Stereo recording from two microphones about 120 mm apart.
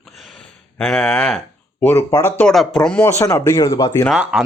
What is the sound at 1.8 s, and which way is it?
Speech, 20° left (ahead or behind).